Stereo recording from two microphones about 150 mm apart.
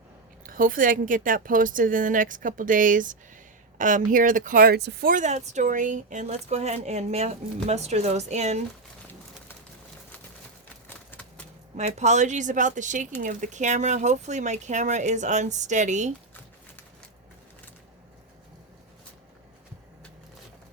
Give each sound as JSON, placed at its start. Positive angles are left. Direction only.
{"t": 0.4, "sound": "speech", "side_deg": -70}
{"t": 10.8, "sound": "a sound", "side_deg": 10}
{"t": 11.8, "sound": "speech", "side_deg": -50}